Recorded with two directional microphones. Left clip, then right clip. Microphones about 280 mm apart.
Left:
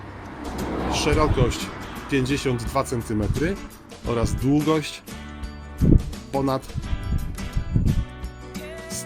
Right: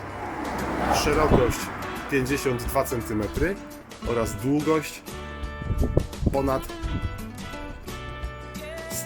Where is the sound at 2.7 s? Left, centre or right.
Centre.